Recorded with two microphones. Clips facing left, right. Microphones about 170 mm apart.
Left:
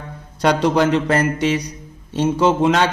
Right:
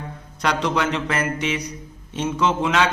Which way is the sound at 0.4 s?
35° left (ahead or behind).